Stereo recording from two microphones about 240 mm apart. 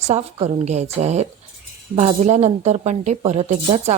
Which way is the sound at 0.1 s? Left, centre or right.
Right.